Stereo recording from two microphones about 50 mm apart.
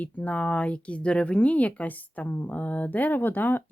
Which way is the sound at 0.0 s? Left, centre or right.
Left.